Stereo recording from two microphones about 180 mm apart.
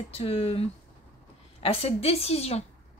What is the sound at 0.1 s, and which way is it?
A woman's voice, 35° left (ahead or behind).